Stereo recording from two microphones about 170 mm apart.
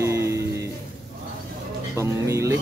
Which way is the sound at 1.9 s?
15° right (ahead or behind).